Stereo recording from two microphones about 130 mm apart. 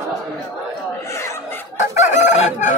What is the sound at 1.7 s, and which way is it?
Chicken, 65° left (ahead or behind).